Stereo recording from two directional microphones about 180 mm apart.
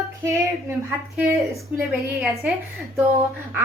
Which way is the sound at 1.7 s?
5° right (ahead or behind).